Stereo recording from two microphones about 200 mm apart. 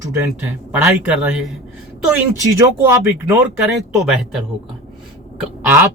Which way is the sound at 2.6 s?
15° right (ahead or behind).